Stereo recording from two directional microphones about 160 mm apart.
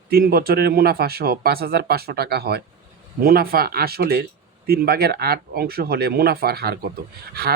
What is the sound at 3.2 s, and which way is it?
Speech, 70° right (ahead or behind).